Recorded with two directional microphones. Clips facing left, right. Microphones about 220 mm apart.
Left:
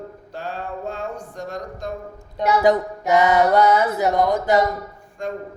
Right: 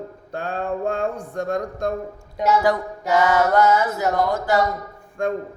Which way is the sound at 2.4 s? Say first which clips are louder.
Left 2 dB; 15° left (ahead or behind).